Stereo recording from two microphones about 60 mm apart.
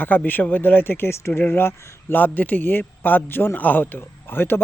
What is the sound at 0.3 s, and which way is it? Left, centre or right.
A man's voice, left.